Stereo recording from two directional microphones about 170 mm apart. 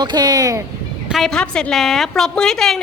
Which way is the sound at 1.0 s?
Centre (ahead or behind).